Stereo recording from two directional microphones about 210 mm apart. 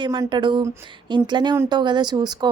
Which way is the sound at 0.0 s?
20° right (ahead or behind).